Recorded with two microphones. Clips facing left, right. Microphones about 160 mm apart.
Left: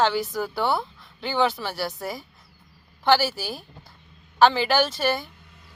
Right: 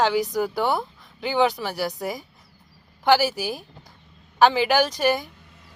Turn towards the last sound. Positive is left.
turn(degrees=-15)  # may be behind; listen again after turning